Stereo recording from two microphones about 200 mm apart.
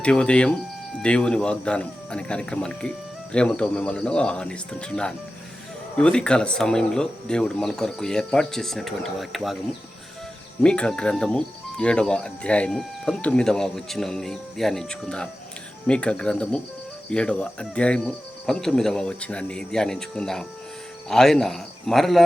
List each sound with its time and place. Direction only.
0.0 s speech: 5° left (ahead or behind)
10.6 s speech: 5° left (ahead or behind)